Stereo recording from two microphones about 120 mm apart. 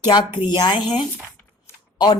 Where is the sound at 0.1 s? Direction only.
40° left (ahead or behind).